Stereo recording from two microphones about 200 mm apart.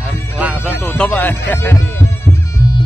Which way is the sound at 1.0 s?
10° left (ahead or behind).